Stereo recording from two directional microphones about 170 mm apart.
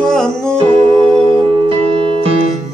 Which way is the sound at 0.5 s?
35° right (ahead or behind).